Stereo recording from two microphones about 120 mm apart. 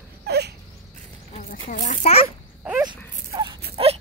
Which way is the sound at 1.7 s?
90° left.